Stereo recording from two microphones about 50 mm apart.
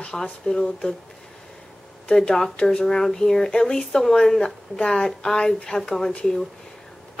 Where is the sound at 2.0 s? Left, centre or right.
Centre.